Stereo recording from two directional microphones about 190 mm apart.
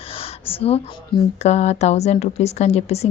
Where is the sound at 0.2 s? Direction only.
30° left (ahead or behind).